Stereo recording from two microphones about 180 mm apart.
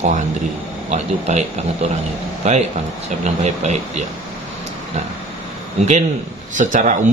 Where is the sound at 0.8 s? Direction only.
40° right (ahead or behind).